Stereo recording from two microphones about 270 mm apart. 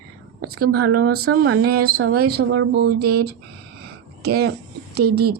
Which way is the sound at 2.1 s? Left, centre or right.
Right.